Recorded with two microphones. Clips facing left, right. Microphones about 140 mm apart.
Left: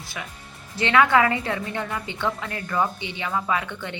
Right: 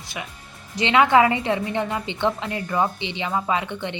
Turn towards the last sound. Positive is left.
turn(degrees=-20)  # may be behind; listen again after turning